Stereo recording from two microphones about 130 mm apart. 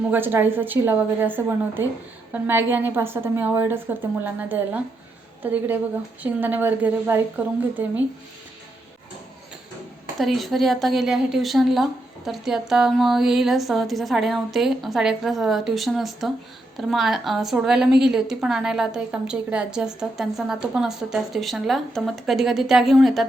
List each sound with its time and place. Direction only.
0.1 s a woman's voice: 15° right (ahead or behind)
10.2 s a woman's voice: centre (ahead or behind)